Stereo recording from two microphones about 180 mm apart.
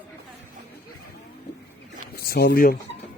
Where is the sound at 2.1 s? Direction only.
60° left (ahead or behind).